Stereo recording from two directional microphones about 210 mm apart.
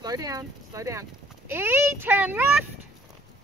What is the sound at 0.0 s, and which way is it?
Speech, 15° right (ahead or behind).